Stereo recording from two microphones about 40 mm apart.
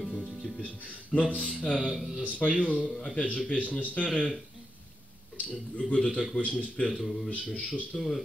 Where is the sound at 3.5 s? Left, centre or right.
Left.